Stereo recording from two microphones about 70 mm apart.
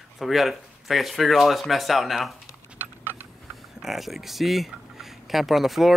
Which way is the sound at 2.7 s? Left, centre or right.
Right.